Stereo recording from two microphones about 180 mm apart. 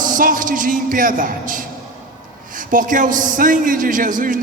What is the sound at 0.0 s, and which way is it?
A man's voice, 50° right (ahead or behind).